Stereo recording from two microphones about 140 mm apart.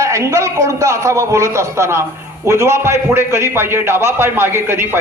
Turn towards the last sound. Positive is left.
turn(degrees=-15)  # may be behind; listen again after turning